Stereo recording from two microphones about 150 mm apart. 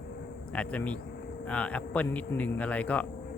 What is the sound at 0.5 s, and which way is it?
Speech, 10° left (ahead or behind).